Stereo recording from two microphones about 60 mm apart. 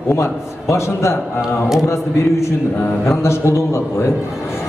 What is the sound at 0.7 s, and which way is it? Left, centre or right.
Speech, left.